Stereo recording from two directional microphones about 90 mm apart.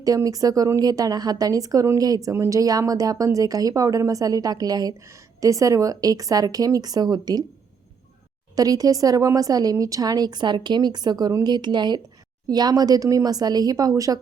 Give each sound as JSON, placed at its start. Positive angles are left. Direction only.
{"t": 0.0, "sound": "a woman's voice", "side_deg": -40}
{"t": 8.5, "sound": "a woman's voice", "side_deg": -40}